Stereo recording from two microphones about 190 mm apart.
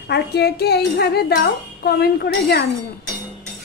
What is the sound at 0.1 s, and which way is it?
A woman's voice, 60° left (ahead or behind).